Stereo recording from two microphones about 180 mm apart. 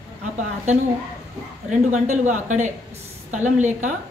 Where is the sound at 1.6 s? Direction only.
40° right (ahead or behind).